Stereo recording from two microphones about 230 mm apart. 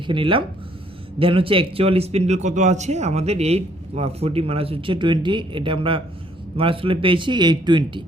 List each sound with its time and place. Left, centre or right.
0.1 s speech: right